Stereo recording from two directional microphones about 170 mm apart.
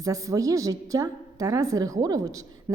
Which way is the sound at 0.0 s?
20° right (ahead or behind).